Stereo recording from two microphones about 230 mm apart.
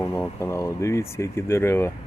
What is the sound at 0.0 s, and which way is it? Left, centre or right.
Speech, centre.